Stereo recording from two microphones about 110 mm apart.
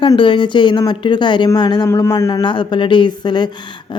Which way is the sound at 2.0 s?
25° left (ahead or behind).